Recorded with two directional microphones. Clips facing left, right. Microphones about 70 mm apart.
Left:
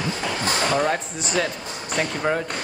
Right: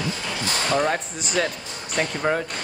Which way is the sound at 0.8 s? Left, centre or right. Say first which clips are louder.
Even; centre.